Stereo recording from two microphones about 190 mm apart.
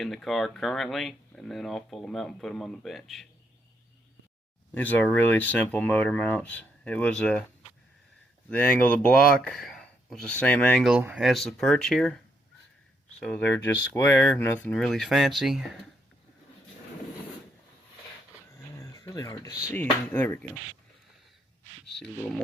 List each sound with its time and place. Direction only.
0.0 s speech: centre (ahead or behind)
4.7 s speech: 10° left (ahead or behind)
8.4 s speech: 5° left (ahead or behind)
18.5 s a sound: 15° left (ahead or behind)
19.7 s speech: 10° left (ahead or behind)